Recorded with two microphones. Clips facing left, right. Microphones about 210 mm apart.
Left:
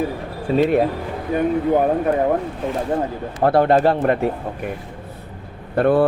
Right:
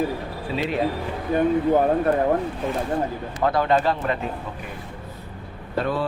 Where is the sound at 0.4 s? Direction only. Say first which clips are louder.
Left 10 dB; 45° left (ahead or behind).